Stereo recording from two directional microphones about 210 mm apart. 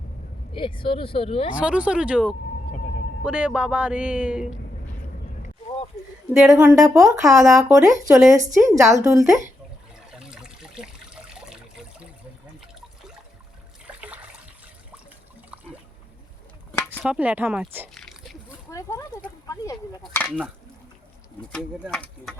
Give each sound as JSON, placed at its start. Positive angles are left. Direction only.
{"t": 0.5, "sound": "speech", "side_deg": 25}
{"t": 1.5, "sound": "speech", "side_deg": -5}
{"t": 5.4, "sound": "a sound", "side_deg": 30}
{"t": 6.7, "sound": "speech", "side_deg": -15}
{"t": 10.1, "sound": "water", "side_deg": -5}
{"t": 13.8, "sound": "water", "side_deg": -5}
{"t": 16.8, "sound": "a sound", "side_deg": 0}
{"t": 18.7, "sound": "a sound", "side_deg": 15}
{"t": 20.0, "sound": "speech", "side_deg": 5}
{"t": 21.5, "sound": "speech", "side_deg": 0}